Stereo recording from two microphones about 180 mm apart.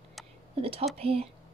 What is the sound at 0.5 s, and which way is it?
Speech, 30° right (ahead or behind).